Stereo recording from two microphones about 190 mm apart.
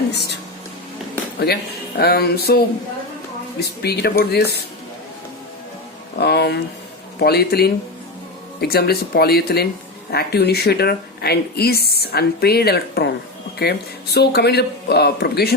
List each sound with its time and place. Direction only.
2.0 s speech: 55° left (ahead or behind)
3.6 s speech: 60° left (ahead or behind)
6.1 s speech: 60° left (ahead or behind)